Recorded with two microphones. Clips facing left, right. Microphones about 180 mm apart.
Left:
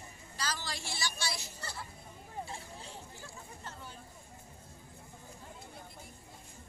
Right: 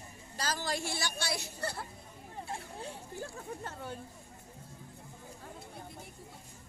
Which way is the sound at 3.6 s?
55° right (ahead or behind).